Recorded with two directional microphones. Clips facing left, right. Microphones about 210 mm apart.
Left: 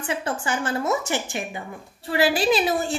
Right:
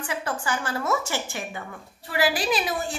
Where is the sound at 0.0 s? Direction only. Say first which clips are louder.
Left 3 dB; 25° left (ahead or behind).